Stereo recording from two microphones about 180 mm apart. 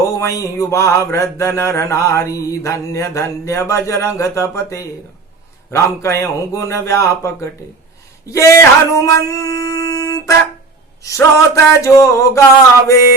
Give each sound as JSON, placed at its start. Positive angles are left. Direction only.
{"t": 0.0, "sound": "mantra", "side_deg": 15}